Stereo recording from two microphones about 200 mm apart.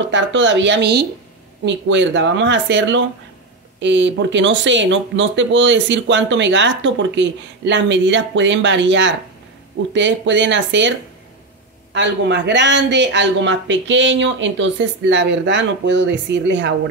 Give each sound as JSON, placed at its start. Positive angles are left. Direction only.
{"t": 0.1, "sound": "speech", "side_deg": -65}